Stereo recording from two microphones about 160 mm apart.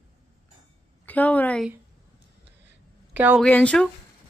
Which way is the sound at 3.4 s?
5° left (ahead or behind).